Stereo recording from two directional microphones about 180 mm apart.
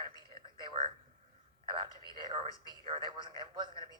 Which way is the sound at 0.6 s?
30° right (ahead or behind).